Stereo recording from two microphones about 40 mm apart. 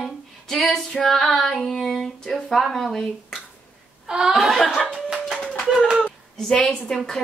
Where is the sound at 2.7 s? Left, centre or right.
Centre.